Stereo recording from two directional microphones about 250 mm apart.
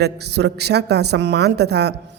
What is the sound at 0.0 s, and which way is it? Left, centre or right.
A woman's voice, right.